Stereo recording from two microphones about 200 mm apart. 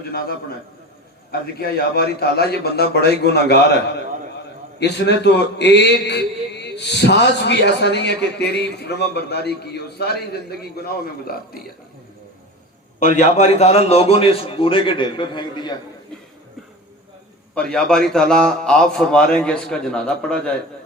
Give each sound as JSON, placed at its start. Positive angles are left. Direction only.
{"t": 0.1, "sound": "a man's voice", "side_deg": 50}
{"t": 4.8, "sound": "a man's voice", "side_deg": 60}
{"t": 13.0, "sound": "a man's voice", "side_deg": 35}
{"t": 17.5, "sound": "a man's voice", "side_deg": 5}